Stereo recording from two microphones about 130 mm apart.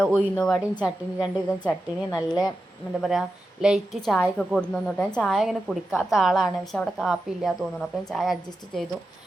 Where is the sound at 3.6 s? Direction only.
5° right (ahead or behind).